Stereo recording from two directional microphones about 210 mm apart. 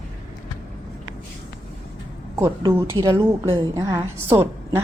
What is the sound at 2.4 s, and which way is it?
Speech, 15° right (ahead or behind).